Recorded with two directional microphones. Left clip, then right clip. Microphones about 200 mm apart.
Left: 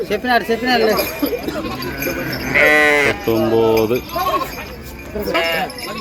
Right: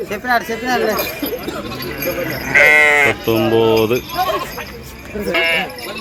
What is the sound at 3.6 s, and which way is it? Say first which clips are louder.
Speech: right 1 dB; centre (ahead or behind).